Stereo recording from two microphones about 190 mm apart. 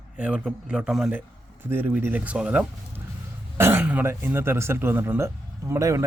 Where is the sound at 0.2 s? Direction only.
5° right (ahead or behind).